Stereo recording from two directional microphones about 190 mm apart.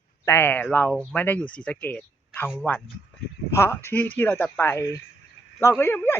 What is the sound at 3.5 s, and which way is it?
Speech, 15° left (ahead or behind).